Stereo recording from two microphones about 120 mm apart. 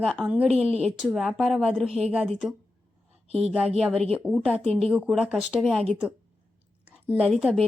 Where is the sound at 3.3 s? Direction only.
60° right (ahead or behind).